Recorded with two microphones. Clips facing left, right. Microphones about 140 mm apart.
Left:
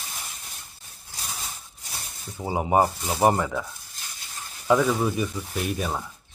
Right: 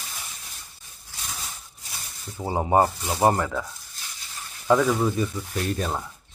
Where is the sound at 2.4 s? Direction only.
10° left (ahead or behind).